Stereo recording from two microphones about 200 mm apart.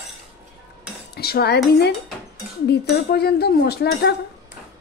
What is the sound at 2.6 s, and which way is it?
Speech, 55° left (ahead or behind).